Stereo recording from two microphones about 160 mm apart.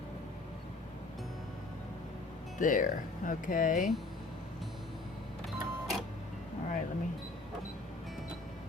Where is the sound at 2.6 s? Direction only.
55° left (ahead or behind).